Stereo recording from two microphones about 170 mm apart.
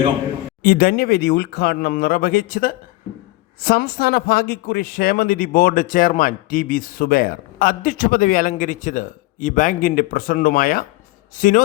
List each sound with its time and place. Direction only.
0.6 s a man's voice: 55° left (ahead or behind)